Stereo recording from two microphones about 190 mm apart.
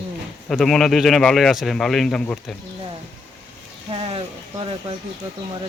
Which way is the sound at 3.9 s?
30° right (ahead or behind).